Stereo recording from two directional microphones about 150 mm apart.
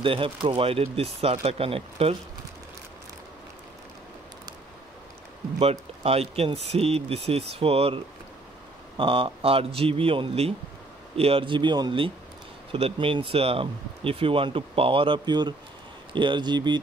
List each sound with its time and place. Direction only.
0.0 s speech: 35° right (ahead or behind)
5.6 s speech: 40° right (ahead or behind)